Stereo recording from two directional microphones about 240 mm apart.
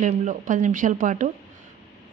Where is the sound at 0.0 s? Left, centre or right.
Right.